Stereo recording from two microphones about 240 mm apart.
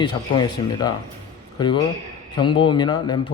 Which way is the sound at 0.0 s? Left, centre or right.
Centre.